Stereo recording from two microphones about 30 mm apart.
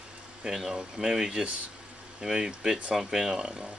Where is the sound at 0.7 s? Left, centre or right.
Centre.